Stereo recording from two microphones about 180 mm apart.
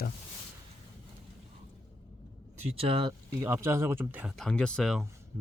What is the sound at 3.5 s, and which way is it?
Speech, 15° right (ahead or behind).